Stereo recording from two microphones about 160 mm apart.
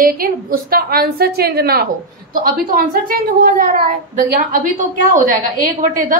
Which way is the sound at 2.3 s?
60° right (ahead or behind).